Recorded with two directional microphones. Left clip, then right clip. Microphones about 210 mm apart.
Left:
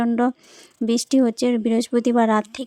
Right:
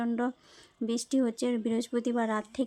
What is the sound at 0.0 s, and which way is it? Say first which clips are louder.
Speech: left 11 dB; 35° left (ahead or behind).